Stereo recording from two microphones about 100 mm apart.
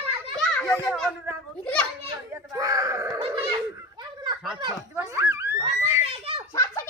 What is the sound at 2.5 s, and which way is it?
Speech, 35° right (ahead or behind).